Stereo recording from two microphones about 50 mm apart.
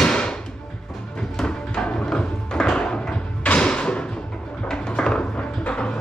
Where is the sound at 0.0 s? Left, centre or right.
Centre.